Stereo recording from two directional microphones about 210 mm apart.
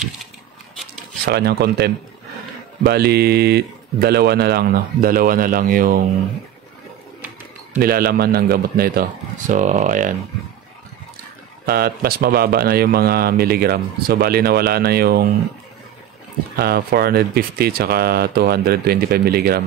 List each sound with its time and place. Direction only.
1.2 s speech: 50° right (ahead or behind)
7.8 s speech: 45° right (ahead or behind)
11.6 s speech: 45° right (ahead or behind)
16.5 s speech: 50° right (ahead or behind)